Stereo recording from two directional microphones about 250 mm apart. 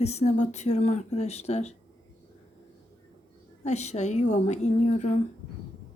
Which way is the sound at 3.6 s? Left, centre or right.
Left.